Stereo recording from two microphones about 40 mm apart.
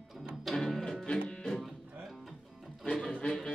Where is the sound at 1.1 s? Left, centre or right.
Left.